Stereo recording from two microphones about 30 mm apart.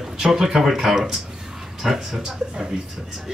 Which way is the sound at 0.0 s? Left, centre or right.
Centre.